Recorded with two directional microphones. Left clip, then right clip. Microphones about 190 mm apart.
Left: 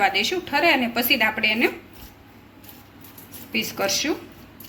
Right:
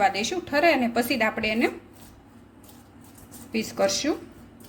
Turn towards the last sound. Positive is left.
turn(degrees=-45)  # may be behind; listen again after turning